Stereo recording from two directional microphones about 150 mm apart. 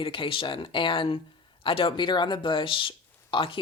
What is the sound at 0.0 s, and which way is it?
Speech, 35° left (ahead or behind).